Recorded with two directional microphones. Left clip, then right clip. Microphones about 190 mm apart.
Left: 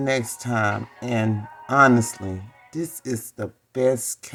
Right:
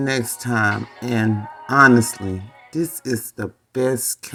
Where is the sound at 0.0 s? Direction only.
10° right (ahead or behind).